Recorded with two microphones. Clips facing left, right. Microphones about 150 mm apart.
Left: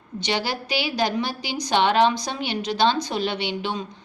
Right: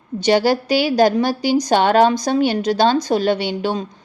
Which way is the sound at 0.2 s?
45° right (ahead or behind).